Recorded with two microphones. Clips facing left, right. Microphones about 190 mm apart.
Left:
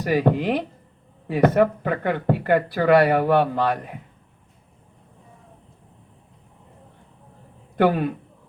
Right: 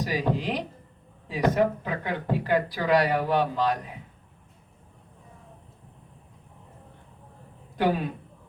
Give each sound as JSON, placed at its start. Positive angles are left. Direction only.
{"t": 0.0, "sound": "speech", "side_deg": 60}
{"t": 7.8, "sound": "speech", "side_deg": 60}